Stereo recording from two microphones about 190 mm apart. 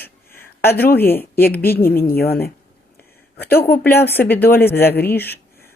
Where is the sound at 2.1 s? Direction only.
55° left (ahead or behind).